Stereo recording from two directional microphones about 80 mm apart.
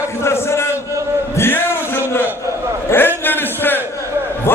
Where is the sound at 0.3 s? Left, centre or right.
Left.